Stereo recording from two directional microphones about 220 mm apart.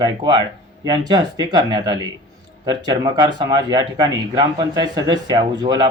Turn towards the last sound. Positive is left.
turn(degrees=-20)  # may be behind; listen again after turning